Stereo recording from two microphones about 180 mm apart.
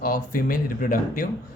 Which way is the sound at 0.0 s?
55° left (ahead or behind).